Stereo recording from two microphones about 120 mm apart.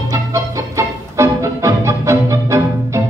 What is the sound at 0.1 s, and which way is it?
Music, 25° right (ahead or behind).